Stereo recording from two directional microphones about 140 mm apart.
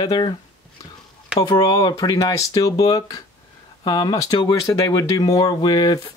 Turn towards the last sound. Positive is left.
turn(degrees=30)  # may be behind; listen again after turning